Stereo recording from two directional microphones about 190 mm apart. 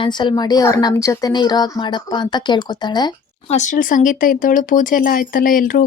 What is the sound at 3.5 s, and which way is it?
Speech, 40° left (ahead or behind).